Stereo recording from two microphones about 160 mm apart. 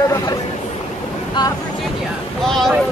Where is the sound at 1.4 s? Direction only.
25° left (ahead or behind).